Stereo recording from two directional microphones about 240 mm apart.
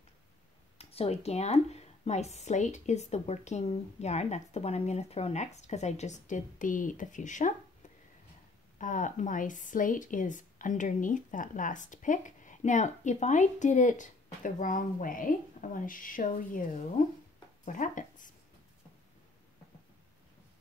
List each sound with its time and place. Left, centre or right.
0.7 s speech: left
8.7 s a woman's voice: left